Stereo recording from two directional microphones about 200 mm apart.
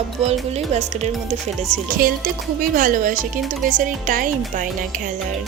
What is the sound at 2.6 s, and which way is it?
Speech, 40° right (ahead or behind).